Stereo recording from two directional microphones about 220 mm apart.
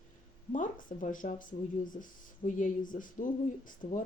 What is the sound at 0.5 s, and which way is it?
Speech, 35° left (ahead or behind).